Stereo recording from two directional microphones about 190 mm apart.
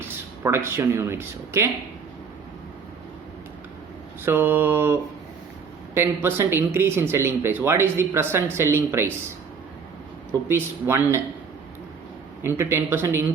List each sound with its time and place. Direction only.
0.0 s speech: 15° right (ahead or behind)
4.3 s speech: 10° right (ahead or behind)
10.5 s speech: 10° right (ahead or behind)
12.4 s speech: 15° right (ahead or behind)